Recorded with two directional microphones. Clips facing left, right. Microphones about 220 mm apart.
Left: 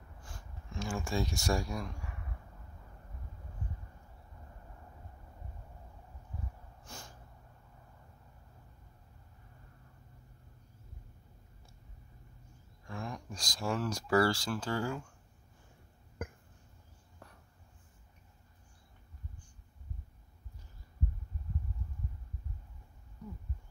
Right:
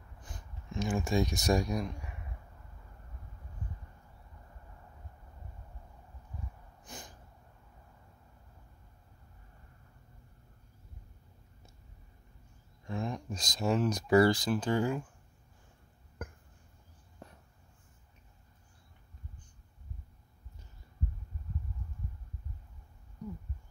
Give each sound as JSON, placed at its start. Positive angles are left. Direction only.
{"t": 0.2, "sound": "a sound", "side_deg": -20}
{"t": 6.8, "sound": "snort", "side_deg": -15}
{"t": 12.8, "sound": "speech", "side_deg": -20}
{"t": 17.2, "sound": "whispering", "side_deg": -20}